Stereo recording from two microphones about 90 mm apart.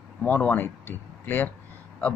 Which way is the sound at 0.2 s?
20° left (ahead or behind).